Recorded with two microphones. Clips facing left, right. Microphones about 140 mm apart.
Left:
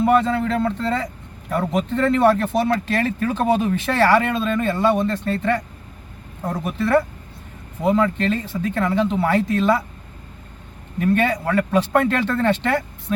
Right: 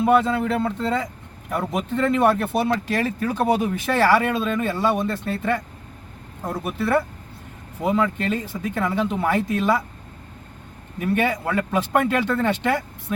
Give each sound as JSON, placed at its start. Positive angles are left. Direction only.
{"t": 0.0, "sound": "speech", "side_deg": -10}
{"t": 11.0, "sound": "speech", "side_deg": -10}